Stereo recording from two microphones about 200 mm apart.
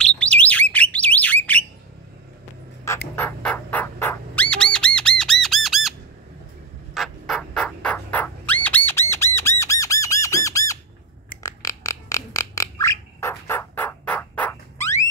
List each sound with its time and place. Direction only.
0.0 s bird: 5° left (ahead or behind)
3.2 s squawk: 10° left (ahead or behind)
6.9 s a sound: centre (ahead or behind)
8.6 s bird: 10° left (ahead or behind)
9.1 s squawk: 10° left (ahead or behind)
11.4 s a sound: 15° left (ahead or behind)